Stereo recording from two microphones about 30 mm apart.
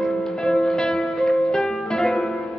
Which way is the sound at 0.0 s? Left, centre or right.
Left.